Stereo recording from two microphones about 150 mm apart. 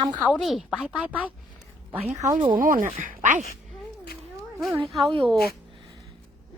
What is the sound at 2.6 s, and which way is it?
Speech, 65° right (ahead or behind).